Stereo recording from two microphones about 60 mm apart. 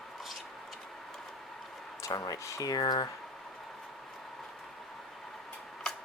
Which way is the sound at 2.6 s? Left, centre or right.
Left.